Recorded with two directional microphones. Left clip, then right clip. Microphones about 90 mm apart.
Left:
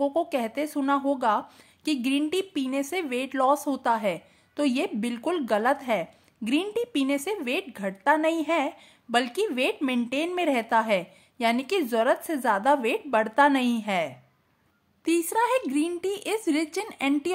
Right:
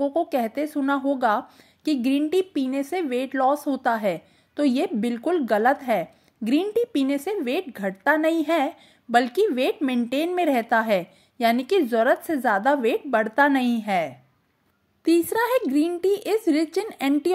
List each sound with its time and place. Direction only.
0.0 s a woman's voice: 20° right (ahead or behind)
0.8 s a woman's voice: 30° right (ahead or behind)
3.8 s a woman's voice: 35° right (ahead or behind)